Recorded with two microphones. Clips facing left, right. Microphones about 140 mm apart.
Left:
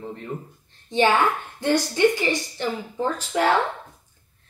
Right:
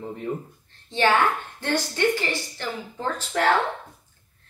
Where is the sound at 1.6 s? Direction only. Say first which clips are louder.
Left 5 dB; 15° left (ahead or behind).